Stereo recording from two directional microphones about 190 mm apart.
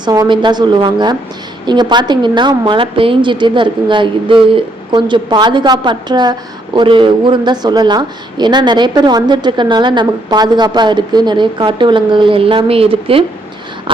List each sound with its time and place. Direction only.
0.0 s a woman's voice: 20° right (ahead or behind)